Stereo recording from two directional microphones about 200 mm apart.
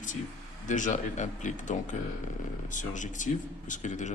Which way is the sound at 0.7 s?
40° left (ahead or behind).